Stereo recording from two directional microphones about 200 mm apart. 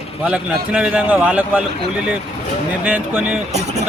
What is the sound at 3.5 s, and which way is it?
Speech, 35° right (ahead or behind).